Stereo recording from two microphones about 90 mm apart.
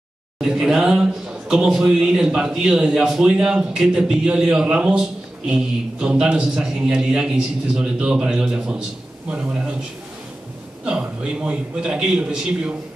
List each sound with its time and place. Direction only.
0.4 s speech: 5° right (ahead or behind)
10.9 s speech: 10° right (ahead or behind)